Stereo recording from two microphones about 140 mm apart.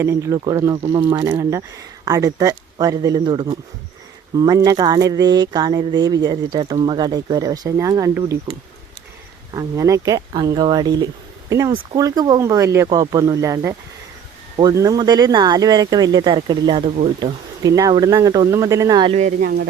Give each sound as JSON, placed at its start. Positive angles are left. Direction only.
{"t": 0.0, "sound": "speech", "side_deg": -20}
{"t": 9.5, "sound": "speech", "side_deg": -25}